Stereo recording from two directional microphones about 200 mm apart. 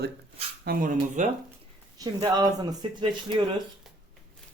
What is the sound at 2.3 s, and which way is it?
Speech, 20° right (ahead or behind).